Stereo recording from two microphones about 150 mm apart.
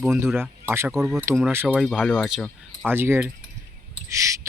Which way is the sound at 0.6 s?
15° right (ahead or behind).